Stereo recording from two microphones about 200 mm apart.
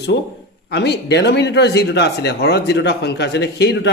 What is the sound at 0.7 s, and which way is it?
Speech, 55° left (ahead or behind).